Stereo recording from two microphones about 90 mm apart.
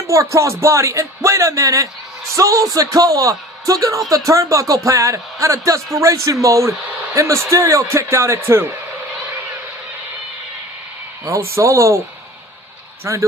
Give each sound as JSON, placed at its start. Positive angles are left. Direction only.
{"t": 0.1, "sound": "speech", "side_deg": -35}
{"t": 11.3, "sound": "speech", "side_deg": -35}
{"t": 13.1, "sound": "speech", "side_deg": -35}